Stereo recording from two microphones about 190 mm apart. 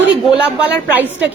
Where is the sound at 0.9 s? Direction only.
10° right (ahead or behind).